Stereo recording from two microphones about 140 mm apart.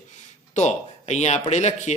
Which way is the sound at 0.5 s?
55° left (ahead or behind).